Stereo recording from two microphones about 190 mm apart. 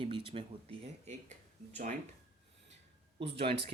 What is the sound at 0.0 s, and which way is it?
Speech, 25° right (ahead or behind).